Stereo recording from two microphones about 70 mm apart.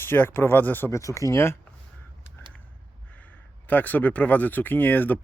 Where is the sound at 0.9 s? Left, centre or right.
Left.